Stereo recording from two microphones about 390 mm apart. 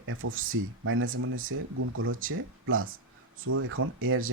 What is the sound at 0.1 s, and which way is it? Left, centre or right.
Speech, right.